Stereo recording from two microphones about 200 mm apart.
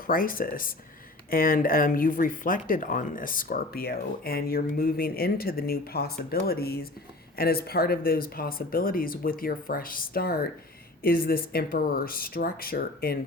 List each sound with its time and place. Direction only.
0.1 s speech: 45° left (ahead or behind)